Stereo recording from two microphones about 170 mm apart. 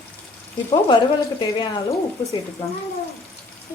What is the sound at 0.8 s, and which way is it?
Speech, 25° left (ahead or behind).